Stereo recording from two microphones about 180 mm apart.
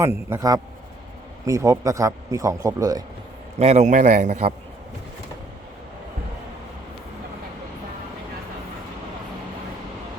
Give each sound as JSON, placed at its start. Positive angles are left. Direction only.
{"t": 0.0, "sound": "speech", "side_deg": -15}
{"t": 3.6, "sound": "a man's voice", "side_deg": -40}